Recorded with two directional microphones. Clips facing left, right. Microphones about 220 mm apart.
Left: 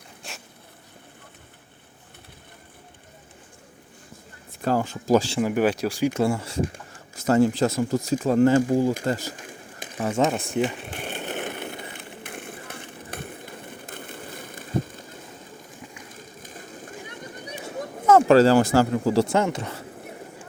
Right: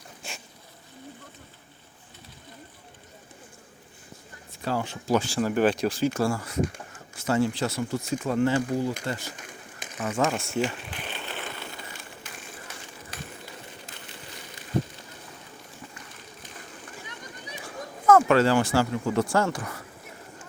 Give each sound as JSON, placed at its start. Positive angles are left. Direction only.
{"t": 0.2, "sound": "vehicle", "side_deg": 0}
{"t": 4.6, "sound": "speech", "side_deg": 45}
{"t": 5.4, "sound": "speech", "side_deg": 10}
{"t": 6.1, "sound": "speech", "side_deg": 20}
{"t": 7.3, "sound": "speech", "side_deg": 45}
{"t": 10.1, "sound": "speech", "side_deg": 20}
{"t": 11.2, "sound": "skateboard", "side_deg": 55}
{"t": 16.0, "sound": "a sound", "side_deg": 45}
{"t": 17.6, "sound": "speech", "side_deg": 25}